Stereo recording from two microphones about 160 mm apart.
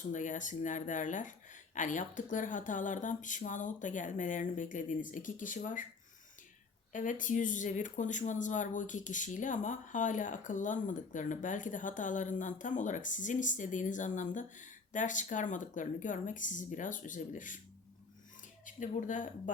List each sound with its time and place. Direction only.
0.1 s speech: 50° left (ahead or behind)
6.9 s speech: 55° left (ahead or behind)
18.6 s speech: 55° left (ahead or behind)